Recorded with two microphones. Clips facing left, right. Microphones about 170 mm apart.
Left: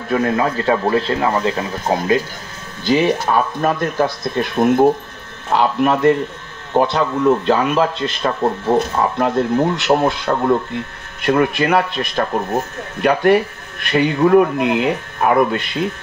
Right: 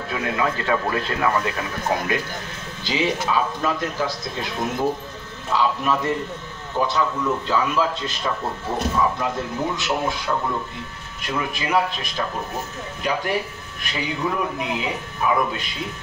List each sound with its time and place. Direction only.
0.1 s speech: 40° left (ahead or behind)
2.8 s a man's voice: 55° left (ahead or behind)